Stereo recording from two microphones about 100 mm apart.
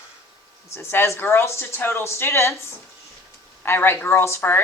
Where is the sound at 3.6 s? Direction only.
20° left (ahead or behind).